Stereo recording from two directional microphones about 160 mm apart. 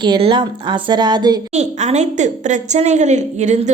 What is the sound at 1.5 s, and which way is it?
A woman's voice, 45° right (ahead or behind).